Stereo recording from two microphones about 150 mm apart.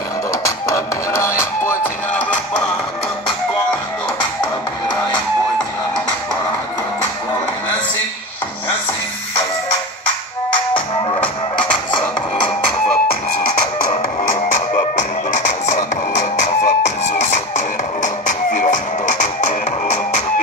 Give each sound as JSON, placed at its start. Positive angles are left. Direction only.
{"t": 0.7, "sound": "music", "side_deg": 20}
{"t": 15.0, "sound": "music", "side_deg": 55}